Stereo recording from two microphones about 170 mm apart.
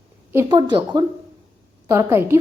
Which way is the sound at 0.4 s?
25° right (ahead or behind).